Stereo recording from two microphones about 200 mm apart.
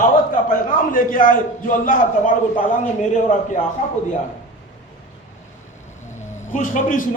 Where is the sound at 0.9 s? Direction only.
45° left (ahead or behind).